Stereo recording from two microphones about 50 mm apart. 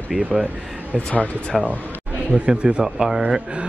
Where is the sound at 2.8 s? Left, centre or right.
Centre.